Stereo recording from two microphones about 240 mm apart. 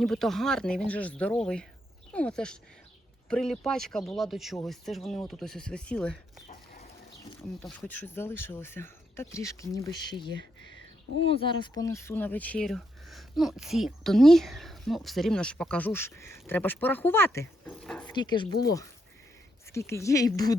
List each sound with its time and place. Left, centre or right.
0.0 s speech: centre
7.3 s speech: centre
11.3 s speech: left; by 18.1 s centre
18.1 s speech: centre